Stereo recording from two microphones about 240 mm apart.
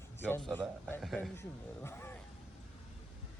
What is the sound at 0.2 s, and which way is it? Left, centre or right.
A man's voice, centre.